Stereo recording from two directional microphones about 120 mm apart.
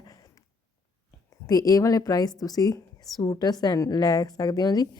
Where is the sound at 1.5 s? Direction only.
30° left (ahead or behind).